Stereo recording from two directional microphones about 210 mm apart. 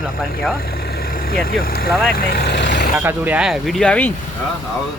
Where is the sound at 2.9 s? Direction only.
10° right (ahead or behind); by 4.1 s 5° left (ahead or behind).